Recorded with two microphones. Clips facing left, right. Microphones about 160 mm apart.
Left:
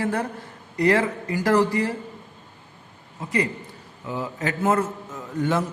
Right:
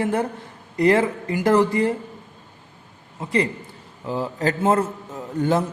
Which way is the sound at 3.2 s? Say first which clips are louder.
Right 3 dB; 30° right (ahead or behind).